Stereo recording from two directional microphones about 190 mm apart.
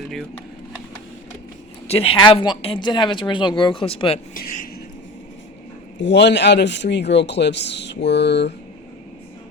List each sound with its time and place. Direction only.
1.9 s speech: 30° left (ahead or behind)
4.4 s a man's voice: 50° left (ahead or behind)
6.0 s speech: 65° left (ahead or behind)